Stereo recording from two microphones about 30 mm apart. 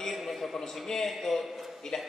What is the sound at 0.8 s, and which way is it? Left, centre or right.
A man's voice, centre.